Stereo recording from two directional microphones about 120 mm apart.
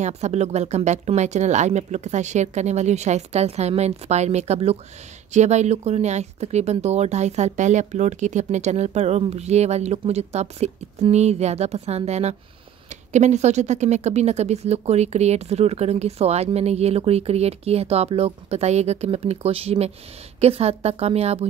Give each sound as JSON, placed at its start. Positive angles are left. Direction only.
{"t": 0.0, "sound": "a woman's voice", "side_deg": -70}